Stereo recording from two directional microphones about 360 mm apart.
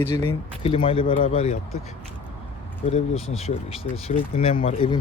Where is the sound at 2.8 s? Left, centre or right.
Centre.